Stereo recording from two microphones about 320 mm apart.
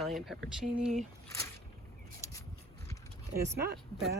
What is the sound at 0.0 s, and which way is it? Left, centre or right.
Speech, centre.